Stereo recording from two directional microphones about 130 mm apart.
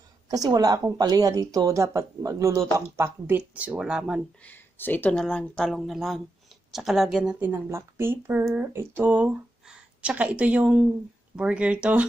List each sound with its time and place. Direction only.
0.3 s a woman's voice: 30° right (ahead or behind); by 4.2 s 5° right (ahead or behind)
4.4 s speech: 15° left (ahead or behind); by 12.1 s 10° right (ahead or behind)